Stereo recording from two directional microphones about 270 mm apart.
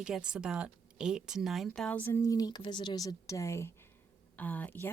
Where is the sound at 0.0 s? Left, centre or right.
Centre.